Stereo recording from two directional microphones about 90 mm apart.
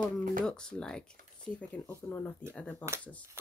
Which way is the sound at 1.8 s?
30° left (ahead or behind).